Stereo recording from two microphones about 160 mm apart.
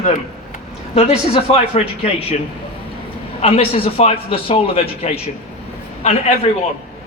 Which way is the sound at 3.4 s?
35° left (ahead or behind).